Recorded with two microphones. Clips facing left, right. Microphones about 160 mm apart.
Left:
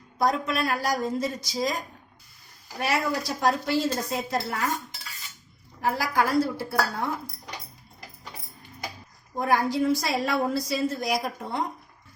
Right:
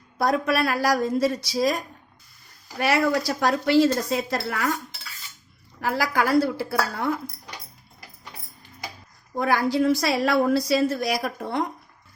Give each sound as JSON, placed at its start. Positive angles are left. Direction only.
{"t": 0.2, "sound": "speech", "side_deg": -70}
{"t": 2.8, "sound": "speech", "side_deg": -80}
{"t": 5.8, "sound": "a woman's voice", "side_deg": -85}
{"t": 9.4, "sound": "a woman's voice", "side_deg": -80}